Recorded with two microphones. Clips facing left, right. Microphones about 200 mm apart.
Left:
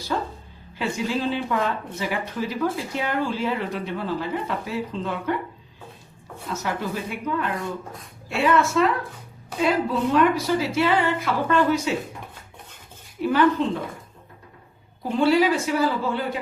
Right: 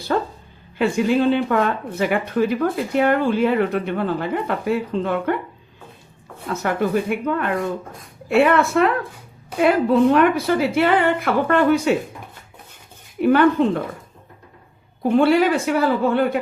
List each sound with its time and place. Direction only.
0.1 s speech: 60° right (ahead or behind)
6.5 s speech: 55° right (ahead or behind)
13.2 s speech: 55° right (ahead or behind)
15.0 s speech: 60° right (ahead or behind)